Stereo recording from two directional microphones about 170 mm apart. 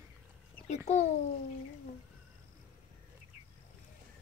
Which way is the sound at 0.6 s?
40° left (ahead or behind).